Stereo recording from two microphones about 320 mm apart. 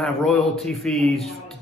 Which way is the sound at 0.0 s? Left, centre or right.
Centre.